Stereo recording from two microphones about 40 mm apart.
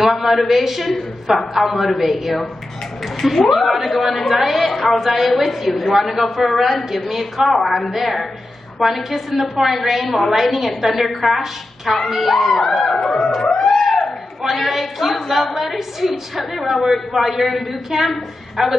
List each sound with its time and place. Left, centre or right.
0.0 s a woman's voice: centre
12.9 s a sound: centre
13.5 s music: centre
14.4 s a woman's voice: centre